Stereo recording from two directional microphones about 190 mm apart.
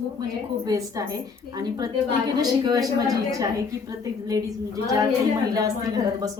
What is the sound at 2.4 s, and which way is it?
Speech, 20° right (ahead or behind).